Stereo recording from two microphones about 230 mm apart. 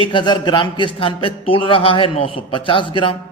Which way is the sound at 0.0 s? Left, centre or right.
Left.